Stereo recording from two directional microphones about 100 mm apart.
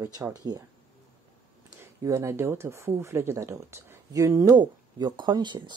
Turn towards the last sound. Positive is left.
turn(degrees=-50)  # may be behind; listen again after turning